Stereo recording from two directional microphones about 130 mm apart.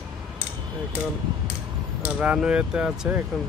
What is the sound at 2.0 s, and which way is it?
Speech, 10° right (ahead or behind).